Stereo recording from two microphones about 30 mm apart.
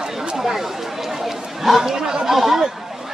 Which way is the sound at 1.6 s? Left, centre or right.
Centre.